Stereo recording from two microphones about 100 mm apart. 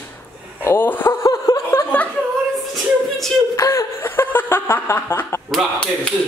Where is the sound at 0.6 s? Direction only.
20° left (ahead or behind).